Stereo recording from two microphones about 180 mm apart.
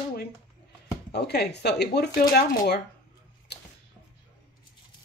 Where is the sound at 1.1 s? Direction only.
65° left (ahead or behind).